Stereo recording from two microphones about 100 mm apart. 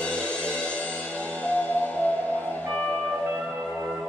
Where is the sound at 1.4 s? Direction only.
15° left (ahead or behind).